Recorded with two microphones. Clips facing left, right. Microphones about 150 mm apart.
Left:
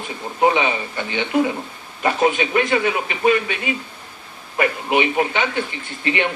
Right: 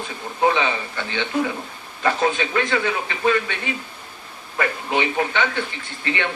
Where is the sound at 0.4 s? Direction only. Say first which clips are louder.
Left 2 dB; 15° left (ahead or behind).